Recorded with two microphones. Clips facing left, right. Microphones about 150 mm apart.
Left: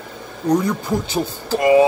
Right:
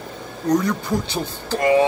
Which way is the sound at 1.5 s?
15° left (ahead or behind).